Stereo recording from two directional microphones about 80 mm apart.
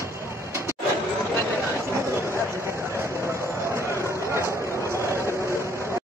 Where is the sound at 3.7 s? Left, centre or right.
Right.